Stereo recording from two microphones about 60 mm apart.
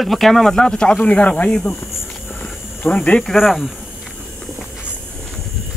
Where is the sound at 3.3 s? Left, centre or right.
Centre.